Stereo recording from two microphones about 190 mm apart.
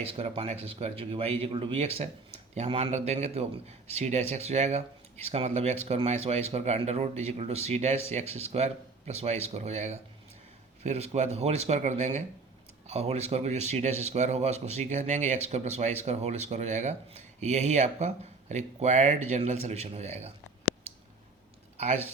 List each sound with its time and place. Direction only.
0.1 s speech: 30° right (ahead or behind)
21.8 s speech: 35° right (ahead or behind)